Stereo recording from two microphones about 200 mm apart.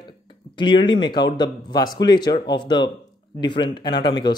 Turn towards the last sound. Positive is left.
turn(degrees=25)  # may be behind; listen again after turning